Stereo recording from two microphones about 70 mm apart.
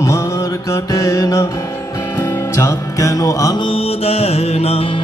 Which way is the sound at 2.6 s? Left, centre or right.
Left.